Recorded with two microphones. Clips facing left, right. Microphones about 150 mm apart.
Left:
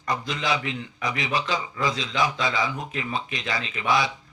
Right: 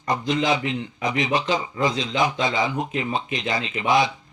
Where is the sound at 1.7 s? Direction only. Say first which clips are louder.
Right 4 dB; 20° right (ahead or behind).